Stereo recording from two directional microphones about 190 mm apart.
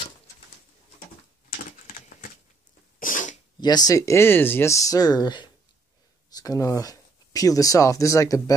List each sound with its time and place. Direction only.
1.9 s a sound: 45° left (ahead or behind)
3.0 s sneeze: 45° left (ahead or behind)
3.6 s speech: 20° left (ahead or behind)